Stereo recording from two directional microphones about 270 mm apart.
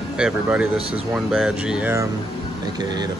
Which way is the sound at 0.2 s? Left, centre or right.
Centre.